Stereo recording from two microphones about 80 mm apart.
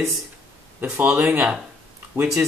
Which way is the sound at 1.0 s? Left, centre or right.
Right.